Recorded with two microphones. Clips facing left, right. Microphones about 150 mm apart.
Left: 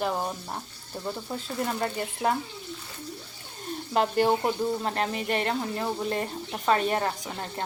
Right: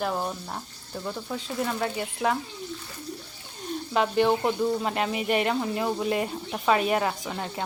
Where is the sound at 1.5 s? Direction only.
5° right (ahead or behind).